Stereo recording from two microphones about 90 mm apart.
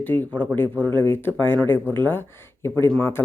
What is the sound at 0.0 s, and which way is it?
Speech, 20° left (ahead or behind).